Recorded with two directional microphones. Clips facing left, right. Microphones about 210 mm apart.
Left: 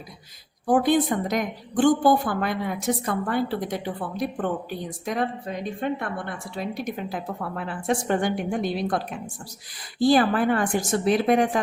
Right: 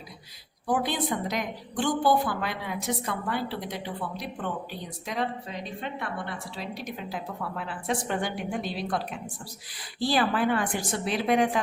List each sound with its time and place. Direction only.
0.7 s a woman's voice: 50° left (ahead or behind)